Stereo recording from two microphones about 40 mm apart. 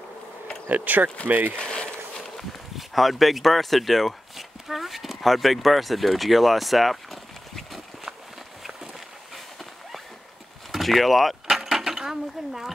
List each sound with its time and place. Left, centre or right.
0.7 s speech: right
1.6 s speech: left
2.9 s speech: centre
10.7 s keys jangling: centre
11.5 s a sound: centre